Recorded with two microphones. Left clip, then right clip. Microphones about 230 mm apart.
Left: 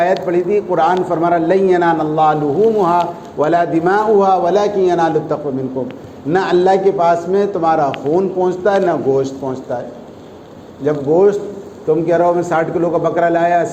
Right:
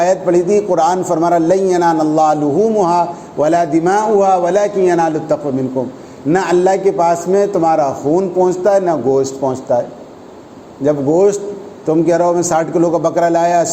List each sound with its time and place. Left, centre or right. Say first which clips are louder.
0.0 s a man's voice: right 2 dB; right
10.8 s a man's voice: right 1 dB; right